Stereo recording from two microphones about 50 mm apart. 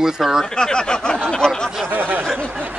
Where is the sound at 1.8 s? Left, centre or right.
Right.